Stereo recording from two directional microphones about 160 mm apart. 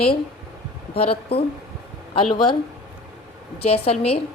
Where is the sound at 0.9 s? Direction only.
35° left (ahead or behind).